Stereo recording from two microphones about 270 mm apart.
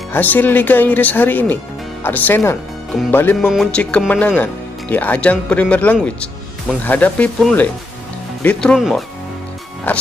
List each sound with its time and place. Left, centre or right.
0.1 s speech: centre